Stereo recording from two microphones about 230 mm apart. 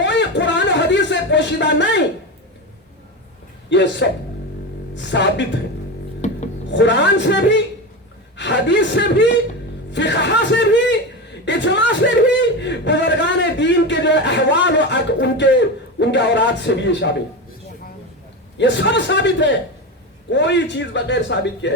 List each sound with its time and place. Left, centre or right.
0.0 s a sound: left
3.7 s a man's voice: left
4.9 s speech: left
6.2 s music: left
6.7 s a man's voice: left
11.4 s a sound: left
16.0 s a man's voice: left
18.5 s a man's voice: left